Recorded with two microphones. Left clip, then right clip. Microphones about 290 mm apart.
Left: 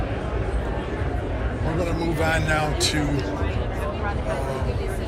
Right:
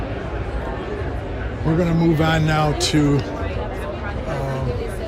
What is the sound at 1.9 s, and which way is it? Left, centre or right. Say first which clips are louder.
Music: right 3 dB; right.